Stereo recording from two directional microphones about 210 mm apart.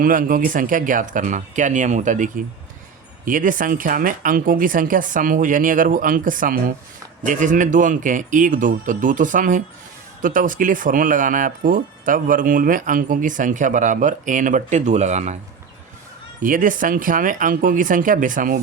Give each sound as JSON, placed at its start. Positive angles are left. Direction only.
{"t": 0.0, "sound": "speech", "side_deg": -40}
{"t": 16.4, "sound": "speech", "side_deg": -40}